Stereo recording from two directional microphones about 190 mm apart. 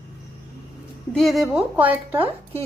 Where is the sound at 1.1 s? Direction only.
Centre (ahead or behind).